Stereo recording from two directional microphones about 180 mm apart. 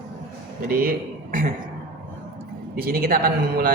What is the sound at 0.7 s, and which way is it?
Speech, 55° right (ahead or behind).